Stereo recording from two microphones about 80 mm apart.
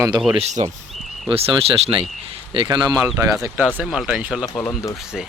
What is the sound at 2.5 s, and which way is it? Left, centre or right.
Speech, right.